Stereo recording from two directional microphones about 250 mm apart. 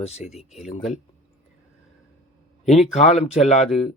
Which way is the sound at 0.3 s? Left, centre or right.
Centre.